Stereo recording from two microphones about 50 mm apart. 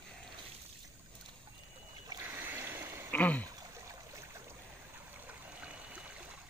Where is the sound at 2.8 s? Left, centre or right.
Right.